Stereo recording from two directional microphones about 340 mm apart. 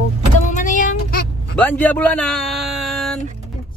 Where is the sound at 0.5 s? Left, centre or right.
Left.